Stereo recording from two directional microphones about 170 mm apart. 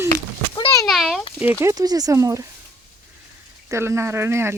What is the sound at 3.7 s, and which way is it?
Speech, 15° right (ahead or behind).